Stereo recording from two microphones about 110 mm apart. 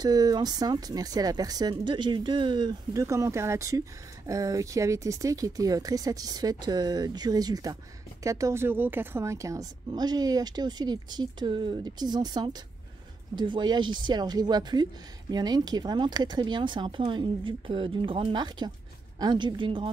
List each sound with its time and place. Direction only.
0.0 s a woman's voice: 35° right (ahead or behind)
2.9 s a woman's voice: 30° right (ahead or behind); by 19.9 s 50° right (ahead or behind)